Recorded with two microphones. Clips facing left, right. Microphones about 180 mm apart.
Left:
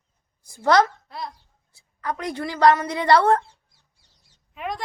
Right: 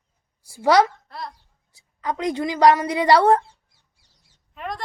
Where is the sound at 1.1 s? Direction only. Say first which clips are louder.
Left 1 dB; centre (ahead or behind).